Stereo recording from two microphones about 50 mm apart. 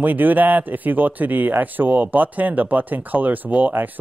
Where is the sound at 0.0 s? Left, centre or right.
Right.